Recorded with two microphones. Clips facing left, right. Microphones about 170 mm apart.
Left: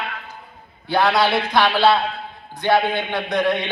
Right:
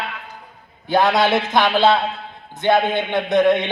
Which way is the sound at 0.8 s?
20° right (ahead or behind).